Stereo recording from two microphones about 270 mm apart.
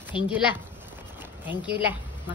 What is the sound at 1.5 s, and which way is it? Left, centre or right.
Speech, centre.